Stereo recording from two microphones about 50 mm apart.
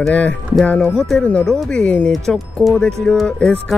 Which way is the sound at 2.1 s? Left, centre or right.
Centre.